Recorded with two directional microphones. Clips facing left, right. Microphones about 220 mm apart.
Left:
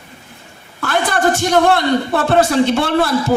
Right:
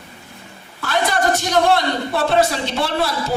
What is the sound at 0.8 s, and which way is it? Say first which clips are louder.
A woman's voice: left 2 dB; 55° left (ahead or behind).